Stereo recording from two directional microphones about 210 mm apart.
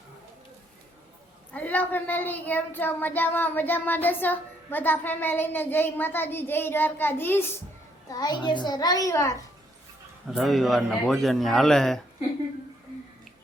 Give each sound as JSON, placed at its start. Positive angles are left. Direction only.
{"t": 1.5, "sound": "a child's voice", "side_deg": 10}
{"t": 10.2, "sound": "speech", "side_deg": 0}